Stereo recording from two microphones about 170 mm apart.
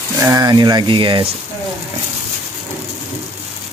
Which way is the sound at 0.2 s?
20° right (ahead or behind).